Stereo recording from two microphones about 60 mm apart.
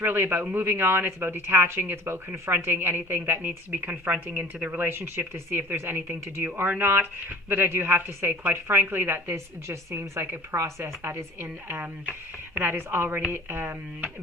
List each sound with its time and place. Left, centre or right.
0.0 s a woman's voice: right
4.8 s a woman's voice: right
11.4 s a woman's voice: right